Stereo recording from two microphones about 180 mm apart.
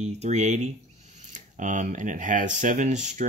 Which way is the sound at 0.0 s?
40° right (ahead or behind).